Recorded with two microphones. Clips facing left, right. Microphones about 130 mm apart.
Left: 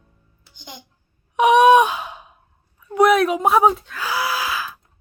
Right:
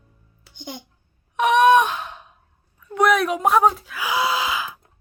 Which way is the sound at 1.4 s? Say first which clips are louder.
Left 3 dB; 10° left (ahead or behind).